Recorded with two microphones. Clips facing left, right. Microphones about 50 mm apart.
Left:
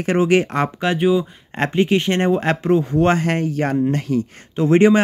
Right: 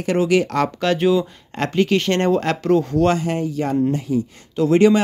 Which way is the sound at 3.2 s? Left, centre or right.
Left.